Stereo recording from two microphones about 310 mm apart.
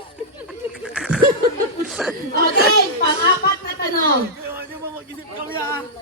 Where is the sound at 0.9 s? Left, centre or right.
Centre.